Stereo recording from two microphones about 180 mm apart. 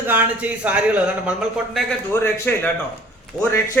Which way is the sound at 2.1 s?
15° left (ahead or behind).